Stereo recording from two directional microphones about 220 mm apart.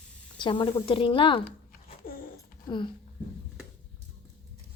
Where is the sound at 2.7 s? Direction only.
20° left (ahead or behind).